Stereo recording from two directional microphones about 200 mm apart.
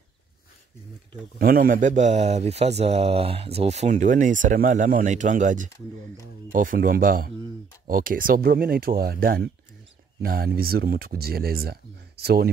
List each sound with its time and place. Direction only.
1.4 s speech: 45° right (ahead or behind)